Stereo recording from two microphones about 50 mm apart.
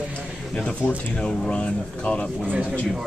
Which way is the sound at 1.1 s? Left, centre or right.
Centre.